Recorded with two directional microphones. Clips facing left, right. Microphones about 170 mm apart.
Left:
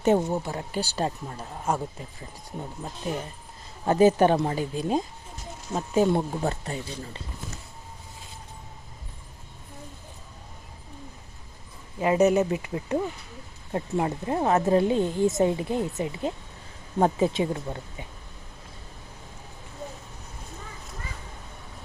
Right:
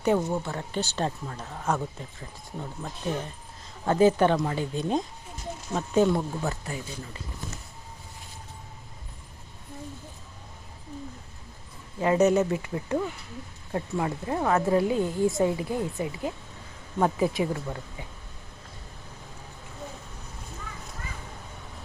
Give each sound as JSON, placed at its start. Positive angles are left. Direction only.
{"t": 0.0, "sound": "speech", "side_deg": 20}
{"t": 6.1, "sound": "speech", "side_deg": 30}
{"t": 11.9, "sound": "speech", "side_deg": 15}